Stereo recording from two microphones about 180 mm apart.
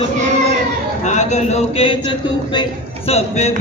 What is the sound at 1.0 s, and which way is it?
Music, 40° left (ahead or behind).